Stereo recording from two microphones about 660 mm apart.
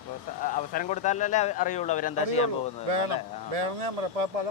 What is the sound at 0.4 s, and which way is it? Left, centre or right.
Speech, centre.